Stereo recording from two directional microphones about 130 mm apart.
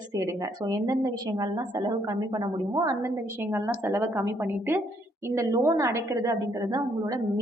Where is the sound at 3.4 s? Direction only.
20° right (ahead or behind).